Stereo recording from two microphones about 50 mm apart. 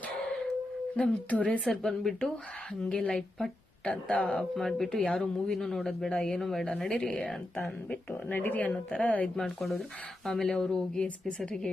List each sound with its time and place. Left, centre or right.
0.9 s speech: left
1.6 s speech: centre
2.9 s speech: left
3.2 s speech: centre
6.1 s speech: centre
8.3 s speech: left
9.0 s speech: left
9.2 s speech: centre